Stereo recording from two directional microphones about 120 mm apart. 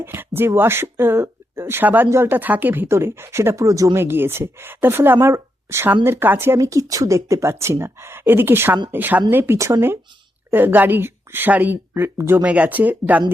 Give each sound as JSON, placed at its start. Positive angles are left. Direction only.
{"t": 0.0, "sound": "speech", "side_deg": -20}